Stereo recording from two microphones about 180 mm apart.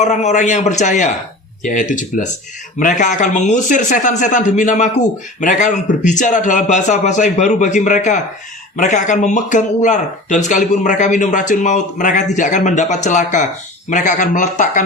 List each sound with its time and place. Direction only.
0.0 s a man's voice: 40° left (ahead or behind)